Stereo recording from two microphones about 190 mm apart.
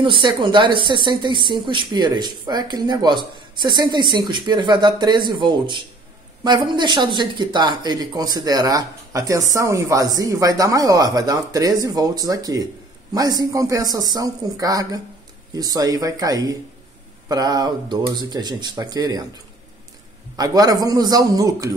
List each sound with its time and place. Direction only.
0.0 s speech: 25° right (ahead or behind)
20.3 s speech: 20° right (ahead or behind)